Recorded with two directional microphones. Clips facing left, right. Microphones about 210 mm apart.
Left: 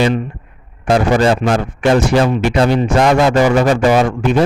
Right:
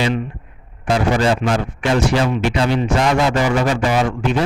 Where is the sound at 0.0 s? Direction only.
40° left (ahead or behind).